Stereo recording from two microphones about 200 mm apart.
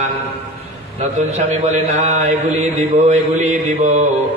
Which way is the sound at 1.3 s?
35° right (ahead or behind).